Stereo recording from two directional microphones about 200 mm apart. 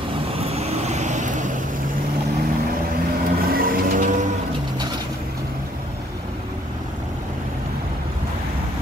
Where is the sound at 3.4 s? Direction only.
45° right (ahead or behind).